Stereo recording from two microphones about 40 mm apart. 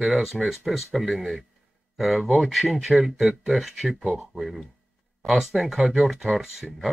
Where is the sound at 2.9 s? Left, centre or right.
Centre.